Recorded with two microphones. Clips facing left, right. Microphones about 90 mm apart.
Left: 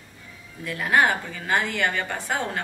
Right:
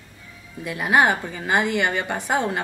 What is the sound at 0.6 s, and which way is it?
A woman's voice, 20° right (ahead or behind).